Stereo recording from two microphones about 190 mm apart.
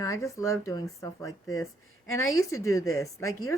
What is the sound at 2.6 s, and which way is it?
Speech, 15° left (ahead or behind).